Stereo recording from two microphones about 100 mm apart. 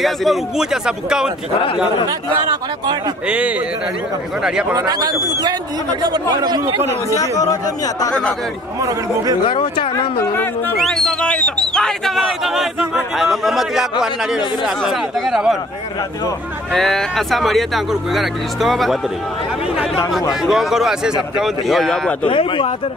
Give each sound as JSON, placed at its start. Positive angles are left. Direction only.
{"t": 0.0, "sound": "speech", "side_deg": 0}
{"t": 3.3, "sound": "speech", "side_deg": -15}
{"t": 4.7, "sound": "speech", "side_deg": -40}
{"t": 7.2, "sound": "speech", "side_deg": 40}
{"t": 8.1, "sound": "speech", "side_deg": 10}
{"t": 9.5, "sound": "speech", "side_deg": 50}
{"t": 10.8, "sound": "speech", "side_deg": 5}
{"t": 16.7, "sound": "speech", "side_deg": 5}
{"t": 20.4, "sound": "speech", "side_deg": 0}
{"t": 22.2, "sound": "speech", "side_deg": 65}